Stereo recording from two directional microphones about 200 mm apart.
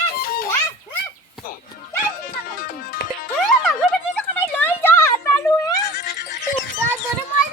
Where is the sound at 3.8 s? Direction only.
10° left (ahead or behind).